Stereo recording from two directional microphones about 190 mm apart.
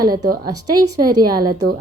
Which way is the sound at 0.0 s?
20° right (ahead or behind).